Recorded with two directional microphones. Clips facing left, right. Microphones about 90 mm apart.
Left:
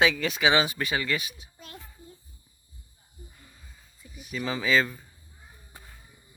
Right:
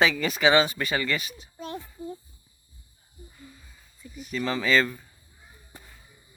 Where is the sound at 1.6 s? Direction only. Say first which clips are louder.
Right 13 dB; 25° right (ahead or behind).